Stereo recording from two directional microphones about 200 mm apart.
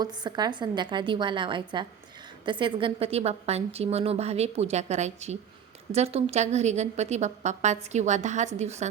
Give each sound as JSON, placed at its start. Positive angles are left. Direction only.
{"t": 0.0, "sound": "a woman's voice", "side_deg": -20}